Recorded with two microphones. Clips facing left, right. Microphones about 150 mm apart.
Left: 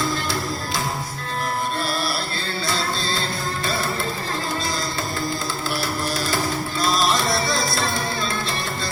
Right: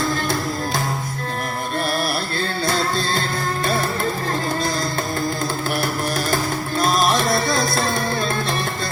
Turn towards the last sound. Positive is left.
turn(degrees=-55)  # may be behind; listen again after turning